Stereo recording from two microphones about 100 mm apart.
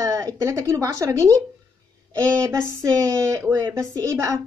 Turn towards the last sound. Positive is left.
turn(degrees=-35)  # may be behind; listen again after turning